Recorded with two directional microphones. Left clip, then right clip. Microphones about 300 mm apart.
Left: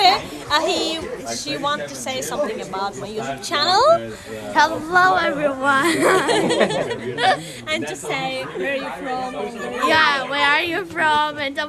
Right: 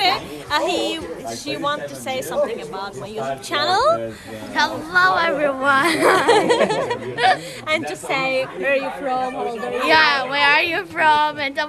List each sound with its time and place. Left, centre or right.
0.0 s a woman's voice: centre
4.5 s a woman's voice: centre
6.1 s speech: centre
7.2 s a woman's voice: centre
7.7 s speech: centre
9.8 s a woman's voice: centre